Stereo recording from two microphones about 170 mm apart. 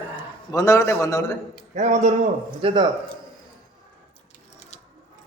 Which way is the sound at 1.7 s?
45° right (ahead or behind).